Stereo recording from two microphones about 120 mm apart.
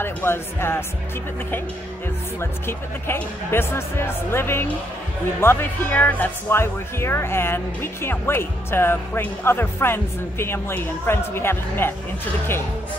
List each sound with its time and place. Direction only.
0.0 s speech: 20° left (ahead or behind)
2.6 s speech: 20° left (ahead or behind)